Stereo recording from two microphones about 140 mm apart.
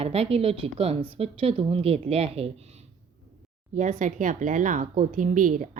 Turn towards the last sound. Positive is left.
turn(degrees=-70)  # may be behind; listen again after turning